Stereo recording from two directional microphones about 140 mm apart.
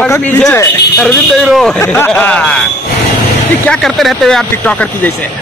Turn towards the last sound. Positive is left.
turn(degrees=10)  # may be behind; listen again after turning